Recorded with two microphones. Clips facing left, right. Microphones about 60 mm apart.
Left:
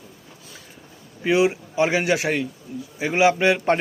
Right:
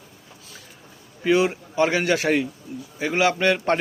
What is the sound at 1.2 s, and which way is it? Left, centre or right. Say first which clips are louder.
A man's voice: left 1 dB; centre.